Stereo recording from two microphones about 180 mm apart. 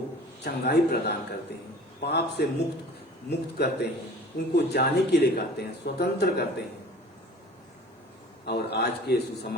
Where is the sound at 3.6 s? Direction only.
65° left (ahead or behind).